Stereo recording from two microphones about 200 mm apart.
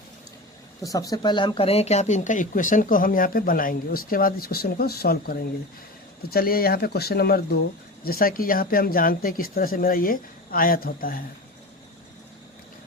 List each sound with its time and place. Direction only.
0.8 s speech: 20° left (ahead or behind); by 11.2 s 45° left (ahead or behind)